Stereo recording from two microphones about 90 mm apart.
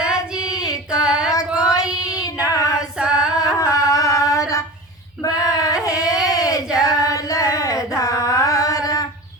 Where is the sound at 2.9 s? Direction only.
10° right (ahead or behind).